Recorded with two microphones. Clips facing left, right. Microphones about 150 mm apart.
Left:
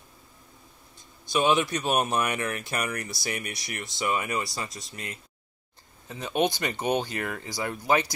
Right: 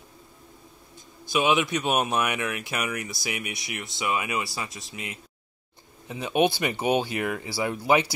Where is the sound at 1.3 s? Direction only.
5° right (ahead or behind).